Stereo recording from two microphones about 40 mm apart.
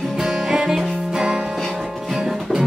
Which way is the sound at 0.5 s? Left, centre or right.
Centre.